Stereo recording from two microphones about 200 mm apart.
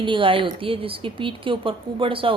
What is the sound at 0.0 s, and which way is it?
A woman's voice, 25° right (ahead or behind).